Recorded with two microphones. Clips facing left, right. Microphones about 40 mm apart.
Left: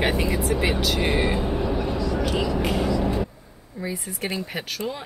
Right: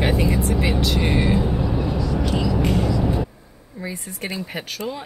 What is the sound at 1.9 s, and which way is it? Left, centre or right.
Vehicle, left.